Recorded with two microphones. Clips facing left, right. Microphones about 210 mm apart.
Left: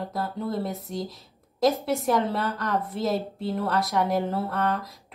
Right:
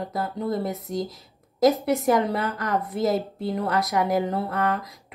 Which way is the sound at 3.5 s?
15° right (ahead or behind).